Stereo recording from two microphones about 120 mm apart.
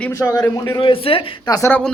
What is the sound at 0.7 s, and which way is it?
Speech, 45° left (ahead or behind).